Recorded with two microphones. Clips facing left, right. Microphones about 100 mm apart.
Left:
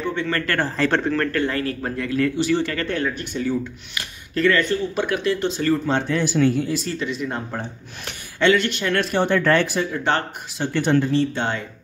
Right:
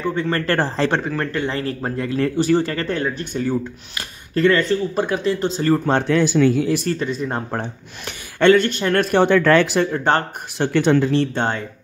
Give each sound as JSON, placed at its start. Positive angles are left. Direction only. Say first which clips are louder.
{"t": 0.1, "sound": "speech", "louder": "right 5 dB", "side_deg": -35}
{"t": 1.1, "sound": "speech", "louder": "left 1 dB", "side_deg": -20}
{"t": 2.3, "sound": "speech", "louder": "right 3 dB", "side_deg": -40}
{"t": 3.3, "sound": "speech", "louder": "right 2 dB", "side_deg": -45}
{"t": 4.4, "sound": "speech", "louder": "right 3 dB", "side_deg": -30}
{"t": 6.0, "sound": "speech", "louder": "right 4 dB", "side_deg": -85}
{"t": 6.9, "sound": "speech", "louder": "right 3 dB", "side_deg": -40}
{"t": 9.1, "sound": "speech", "louder": "right 5 dB", "side_deg": -90}
{"t": 9.8, "sound": "speech", "louder": "right 3 dB", "side_deg": -40}
{"t": 10.6, "sound": "speech", "louder": "right 3 dB", "side_deg": -85}
{"t": 11.3, "sound": "speech", "louder": "right 3 dB", "side_deg": -40}